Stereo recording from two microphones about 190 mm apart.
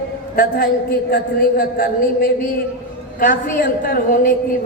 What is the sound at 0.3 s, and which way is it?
A man's voice, 50° left (ahead or behind).